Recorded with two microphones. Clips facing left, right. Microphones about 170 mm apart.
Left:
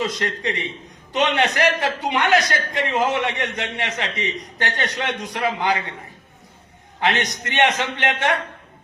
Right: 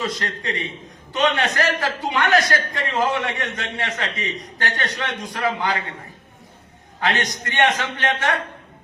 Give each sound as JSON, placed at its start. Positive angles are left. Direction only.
{"t": 0.0, "sound": "a man's voice", "side_deg": 20}
{"t": 7.1, "sound": "a man's voice", "side_deg": 0}
{"t": 7.4, "sound": "a man's voice", "side_deg": 20}